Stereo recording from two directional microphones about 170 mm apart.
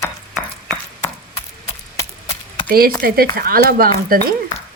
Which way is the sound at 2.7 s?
60° right (ahead or behind).